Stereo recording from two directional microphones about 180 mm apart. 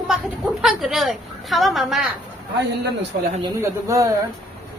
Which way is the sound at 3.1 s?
65° right (ahead or behind).